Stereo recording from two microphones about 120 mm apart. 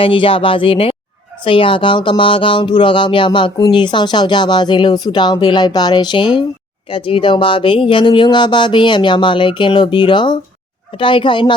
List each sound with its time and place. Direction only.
0.0 s speech: 45° left (ahead or behind)